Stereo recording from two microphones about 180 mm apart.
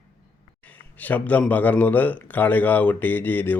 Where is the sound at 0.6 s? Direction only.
10° left (ahead or behind).